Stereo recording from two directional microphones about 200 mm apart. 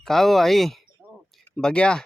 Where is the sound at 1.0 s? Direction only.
10° right (ahead or behind).